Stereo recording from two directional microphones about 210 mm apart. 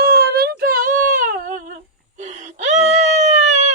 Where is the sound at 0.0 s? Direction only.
45° right (ahead or behind).